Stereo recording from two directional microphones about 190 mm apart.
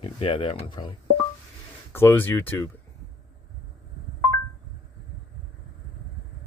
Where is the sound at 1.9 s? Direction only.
10° left (ahead or behind).